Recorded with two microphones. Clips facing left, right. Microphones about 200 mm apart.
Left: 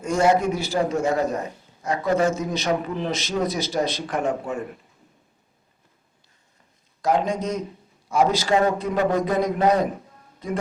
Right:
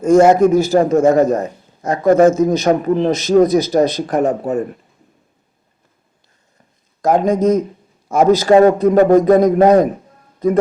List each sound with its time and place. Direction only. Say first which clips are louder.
0.0 s a man's voice: right 10 dB; 45° right (ahead or behind)
7.0 s a man's voice: right 9 dB; 45° right (ahead or behind)